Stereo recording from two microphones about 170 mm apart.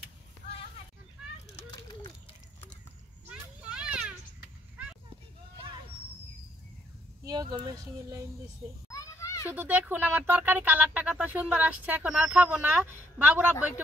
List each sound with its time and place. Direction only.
1.9 s a sound: 25° left (ahead or behind)
3.3 s children playing: 5° right (ahead or behind)
7.2 s speech: 25° right (ahead or behind)
8.9 s children playing: 15° left (ahead or behind)
9.5 s speech: 10° right (ahead or behind)